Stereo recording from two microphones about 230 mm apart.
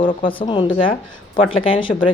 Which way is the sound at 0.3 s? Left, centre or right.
Left.